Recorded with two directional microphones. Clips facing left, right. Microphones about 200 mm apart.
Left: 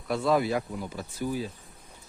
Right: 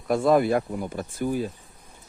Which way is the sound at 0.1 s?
50° right (ahead or behind).